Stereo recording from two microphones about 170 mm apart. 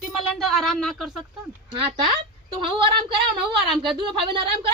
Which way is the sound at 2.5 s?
30° right (ahead or behind).